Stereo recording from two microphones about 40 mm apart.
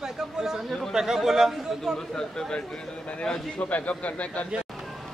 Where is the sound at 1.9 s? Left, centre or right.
Centre.